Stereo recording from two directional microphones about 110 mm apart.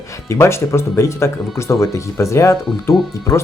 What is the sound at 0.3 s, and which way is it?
Speech, 25° left (ahead or behind).